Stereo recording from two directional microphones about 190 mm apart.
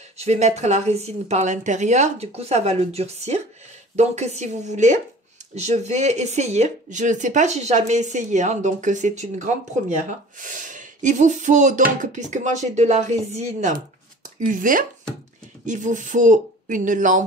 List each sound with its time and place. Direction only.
0.2 s speech: 35° right (ahead or behind)